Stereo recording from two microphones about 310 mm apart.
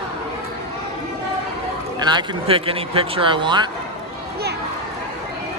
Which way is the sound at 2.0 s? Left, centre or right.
Centre.